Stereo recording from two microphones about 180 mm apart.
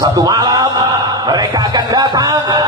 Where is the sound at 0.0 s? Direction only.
20° right (ahead or behind).